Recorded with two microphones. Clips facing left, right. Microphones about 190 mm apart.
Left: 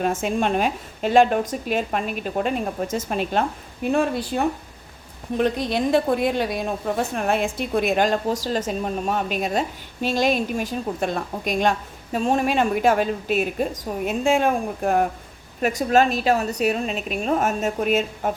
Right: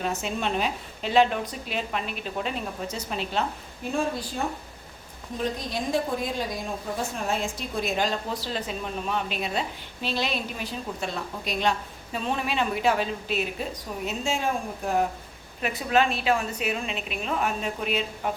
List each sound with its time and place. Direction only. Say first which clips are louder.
0.0 s a woman's voice: left 6 dB; 50° left (ahead or behind)
4.3 s a woman's voice: left 7 dB; 75° left (ahead or behind); by 15.0 s 55° left (ahead or behind)
15.6 s a woman's voice: left 5 dB; 40° left (ahead or behind)